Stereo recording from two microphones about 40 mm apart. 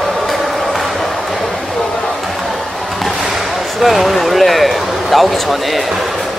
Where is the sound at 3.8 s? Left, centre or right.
Centre.